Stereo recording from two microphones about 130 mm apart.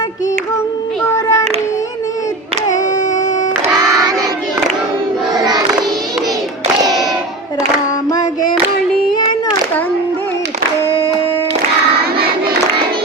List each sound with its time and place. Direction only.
1.0 s child singing: 20° left (ahead or behind)
5.3 s child singing: 30° right (ahead or behind)